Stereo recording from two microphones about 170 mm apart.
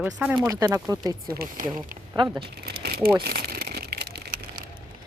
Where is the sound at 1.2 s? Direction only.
60° right (ahead or behind).